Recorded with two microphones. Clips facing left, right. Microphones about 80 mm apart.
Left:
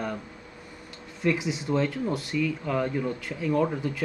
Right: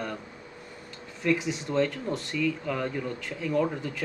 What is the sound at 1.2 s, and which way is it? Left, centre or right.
Speech, centre.